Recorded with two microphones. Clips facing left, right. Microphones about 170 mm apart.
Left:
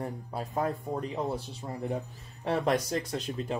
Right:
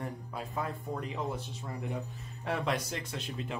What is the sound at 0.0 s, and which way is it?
Speech, 35° left (ahead or behind).